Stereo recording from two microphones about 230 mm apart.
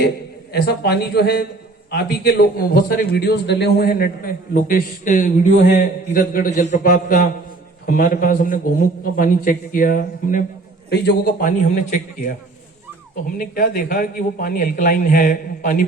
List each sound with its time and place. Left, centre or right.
0.5 s a man's voice: left
13.4 s a man's voice: left